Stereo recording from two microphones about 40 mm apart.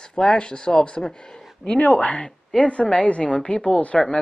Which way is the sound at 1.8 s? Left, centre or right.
Left.